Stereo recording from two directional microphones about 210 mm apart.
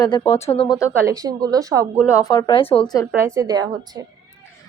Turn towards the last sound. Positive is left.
turn(degrees=-20)  # may be behind; listen again after turning